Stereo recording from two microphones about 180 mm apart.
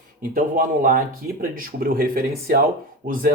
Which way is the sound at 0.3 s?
50° right (ahead or behind).